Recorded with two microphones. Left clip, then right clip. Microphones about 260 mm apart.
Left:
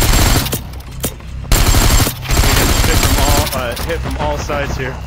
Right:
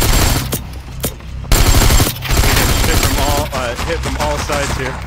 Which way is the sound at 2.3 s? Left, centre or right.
Centre.